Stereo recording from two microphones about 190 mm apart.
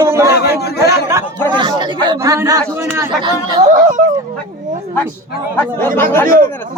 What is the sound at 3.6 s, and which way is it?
Music, 45° right (ahead or behind).